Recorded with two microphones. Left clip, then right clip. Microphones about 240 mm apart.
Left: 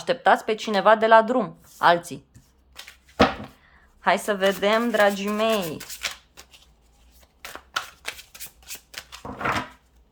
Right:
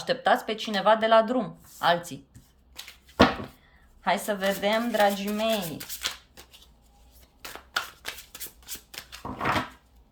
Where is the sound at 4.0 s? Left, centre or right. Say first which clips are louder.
Left 5 dB; centre.